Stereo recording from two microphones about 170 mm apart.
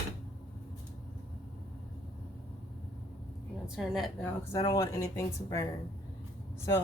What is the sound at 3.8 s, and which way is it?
Speech, centre (ahead or behind).